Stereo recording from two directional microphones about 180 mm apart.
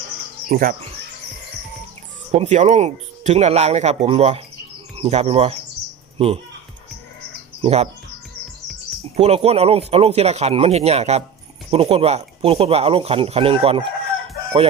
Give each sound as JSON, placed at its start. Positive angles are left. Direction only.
{"t": 0.5, "sound": "speech", "side_deg": -50}
{"t": 2.3, "sound": "speech", "side_deg": -35}
{"t": 7.6, "sound": "speech", "side_deg": -35}
{"t": 9.1, "sound": "speech", "side_deg": -35}